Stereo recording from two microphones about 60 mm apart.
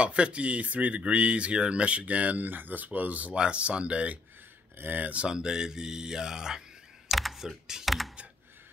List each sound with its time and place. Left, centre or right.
0.0 s speech: centre
4.7 s speech: right; by 6.6 s centre
7.1 s typing: centre